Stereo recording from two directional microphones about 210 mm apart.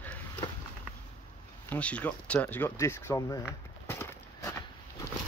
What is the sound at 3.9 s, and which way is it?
Horse, 10° left (ahead or behind).